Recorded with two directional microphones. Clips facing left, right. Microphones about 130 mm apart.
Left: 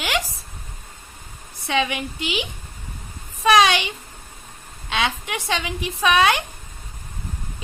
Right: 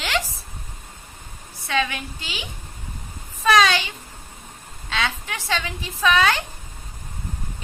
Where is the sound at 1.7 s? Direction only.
20° left (ahead or behind).